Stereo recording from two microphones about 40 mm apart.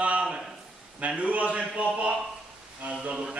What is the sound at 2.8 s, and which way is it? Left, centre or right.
Speech, right.